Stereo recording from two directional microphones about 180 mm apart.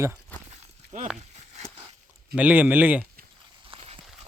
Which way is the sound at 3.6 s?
30° right (ahead or behind).